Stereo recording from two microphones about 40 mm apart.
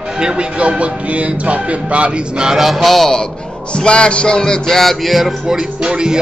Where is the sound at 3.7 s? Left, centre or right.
Left.